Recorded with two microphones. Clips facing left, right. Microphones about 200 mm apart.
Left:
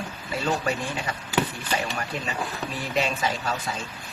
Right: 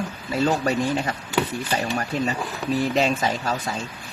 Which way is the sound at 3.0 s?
40° right (ahead or behind).